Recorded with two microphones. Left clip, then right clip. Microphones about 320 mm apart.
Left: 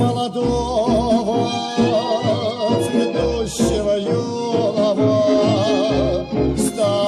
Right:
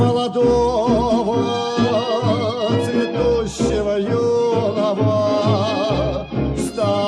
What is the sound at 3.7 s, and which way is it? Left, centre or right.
Music, right.